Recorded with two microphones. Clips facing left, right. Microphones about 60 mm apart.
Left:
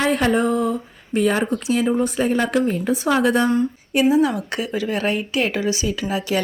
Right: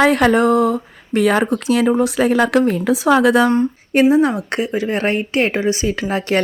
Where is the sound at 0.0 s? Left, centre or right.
Right.